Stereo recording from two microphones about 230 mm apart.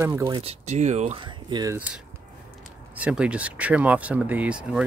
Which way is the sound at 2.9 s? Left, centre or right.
Centre.